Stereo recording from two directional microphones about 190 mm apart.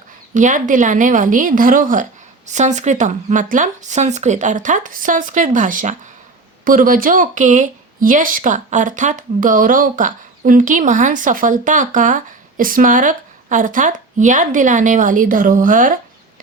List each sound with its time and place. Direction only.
0.3 s speech: 40° right (ahead or behind)